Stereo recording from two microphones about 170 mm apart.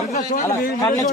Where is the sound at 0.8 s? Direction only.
20° left (ahead or behind).